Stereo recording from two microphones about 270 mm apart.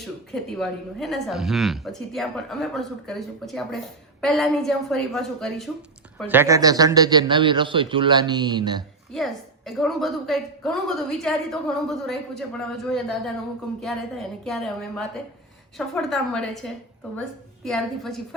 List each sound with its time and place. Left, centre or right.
0.0 s a woman's voice: centre
9.1 s a woman's voice: centre